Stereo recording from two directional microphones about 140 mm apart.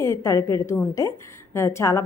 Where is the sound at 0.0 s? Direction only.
20° left (ahead or behind).